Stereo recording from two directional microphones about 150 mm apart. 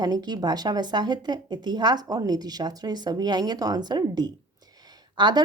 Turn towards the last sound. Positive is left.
turn(degrees=-30)  # may be behind; listen again after turning